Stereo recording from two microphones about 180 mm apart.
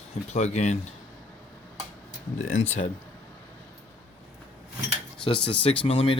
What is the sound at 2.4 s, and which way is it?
Speech, 40° left (ahead or behind).